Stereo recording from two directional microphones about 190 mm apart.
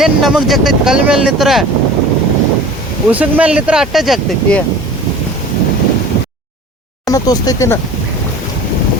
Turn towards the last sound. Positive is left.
turn(degrees=15)  # may be behind; listen again after turning